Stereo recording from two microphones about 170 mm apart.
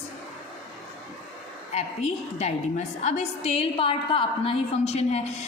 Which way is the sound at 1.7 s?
40° left (ahead or behind).